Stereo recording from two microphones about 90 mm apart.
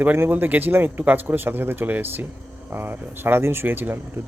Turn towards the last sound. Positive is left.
turn(degrees=-20)  # may be behind; listen again after turning